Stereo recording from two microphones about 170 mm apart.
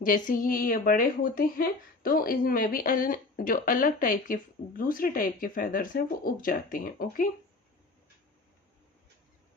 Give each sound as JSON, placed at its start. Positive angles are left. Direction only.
{"t": 0.0, "sound": "a woman's voice", "side_deg": 55}